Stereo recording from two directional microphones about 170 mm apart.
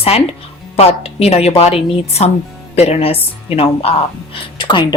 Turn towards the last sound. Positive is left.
turn(degrees=25)  # may be behind; listen again after turning